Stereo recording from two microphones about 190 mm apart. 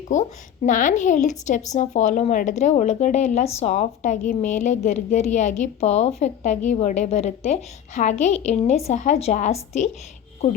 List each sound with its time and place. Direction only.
0.1 s a woman's voice: 40° left (ahead or behind)